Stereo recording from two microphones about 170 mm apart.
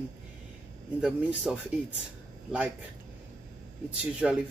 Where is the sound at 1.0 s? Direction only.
5° right (ahead or behind).